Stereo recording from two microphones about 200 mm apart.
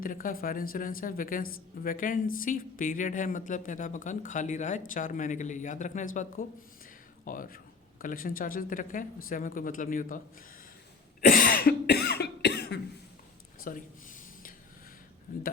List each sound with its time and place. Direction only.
0.0 s a woman's voice: 45° left (ahead or behind)
11.3 s a woman's voice: 45° left (ahead or behind)
11.6 s cough: 55° left (ahead or behind)
13.7 s a sound: 45° left (ahead or behind)